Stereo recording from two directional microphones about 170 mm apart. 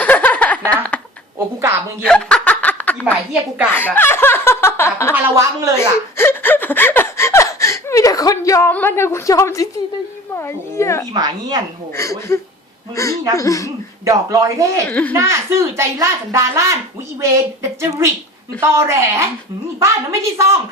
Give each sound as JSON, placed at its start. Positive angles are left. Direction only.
{"t": 0.0, "sound": "a sound", "side_deg": 10}
{"t": 2.0, "sound": "snicker", "side_deg": 5}
{"t": 3.7, "sound": "speech", "side_deg": 10}
{"t": 5.1, "sound": "a woman's voice", "side_deg": -15}
{"t": 5.7, "sound": "chuckle", "side_deg": 15}
{"t": 10.3, "sound": "speech", "side_deg": 15}
{"t": 11.1, "sound": "speech", "side_deg": -25}
{"t": 11.9, "sound": "speech", "side_deg": 15}
{"t": 14.0, "sound": "speech", "side_deg": -20}
{"t": 14.8, "sound": "speech", "side_deg": 10}
{"t": 15.1, "sound": "a woman's voice", "side_deg": -15}